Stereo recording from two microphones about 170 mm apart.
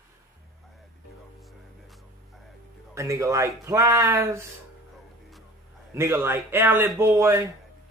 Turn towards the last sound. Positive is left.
turn(degrees=-15)  # may be behind; listen again after turning